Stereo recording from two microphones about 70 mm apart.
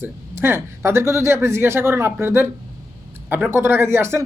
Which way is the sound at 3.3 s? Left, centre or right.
Right.